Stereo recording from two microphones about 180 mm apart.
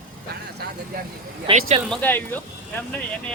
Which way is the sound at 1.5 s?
30° right (ahead or behind).